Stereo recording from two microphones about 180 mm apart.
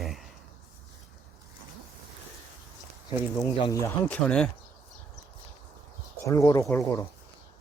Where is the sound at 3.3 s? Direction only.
20° left (ahead or behind).